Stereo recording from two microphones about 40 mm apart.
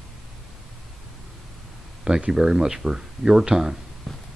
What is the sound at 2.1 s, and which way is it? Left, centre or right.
Speech, centre.